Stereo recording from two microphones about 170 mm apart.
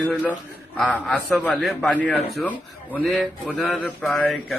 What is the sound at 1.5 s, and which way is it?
Speech, centre (ahead or behind).